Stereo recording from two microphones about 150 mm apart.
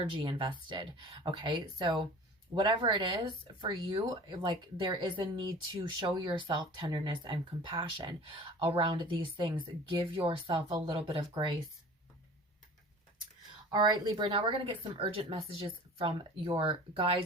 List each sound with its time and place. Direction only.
0.0 s speech: 35° right (ahead or behind)
13.7 s speech: 30° right (ahead or behind)